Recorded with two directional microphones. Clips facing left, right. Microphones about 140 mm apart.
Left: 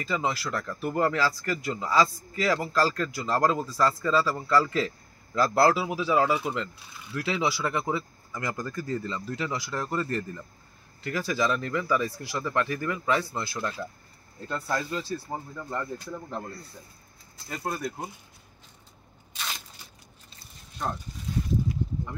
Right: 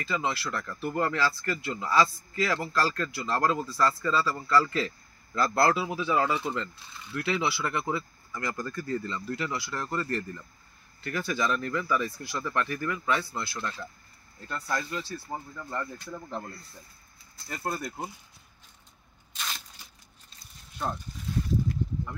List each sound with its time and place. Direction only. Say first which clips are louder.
0.0 s speech: left 2 dB; 15° left (ahead or behind)
17.6 s speech: left 1 dB; centre (ahead or behind)
19.3 s a sound: left 1 dB; 5° left (ahead or behind)